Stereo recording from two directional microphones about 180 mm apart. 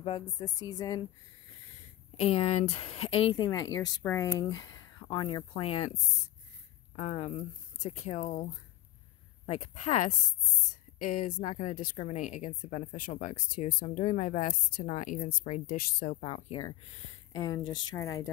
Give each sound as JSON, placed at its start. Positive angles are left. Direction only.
{"t": 0.4, "sound": "a woman's voice", "side_deg": 20}
{"t": 2.1, "sound": "speech", "side_deg": 35}
{"t": 5.5, "sound": "speech", "side_deg": 35}
{"t": 7.0, "sound": "speech", "side_deg": 35}
{"t": 9.5, "sound": "a woman's voice", "side_deg": 40}
{"t": 17.3, "sound": "a woman's voice", "side_deg": 20}